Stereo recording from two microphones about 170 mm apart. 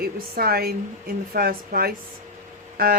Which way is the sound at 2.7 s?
60° right (ahead or behind).